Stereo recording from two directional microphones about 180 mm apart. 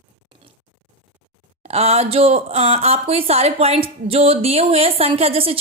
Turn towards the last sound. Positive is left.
turn(degrees=-30)  # may be behind; listen again after turning